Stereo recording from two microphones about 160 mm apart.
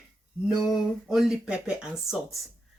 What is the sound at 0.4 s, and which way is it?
Speech, 5° right (ahead or behind).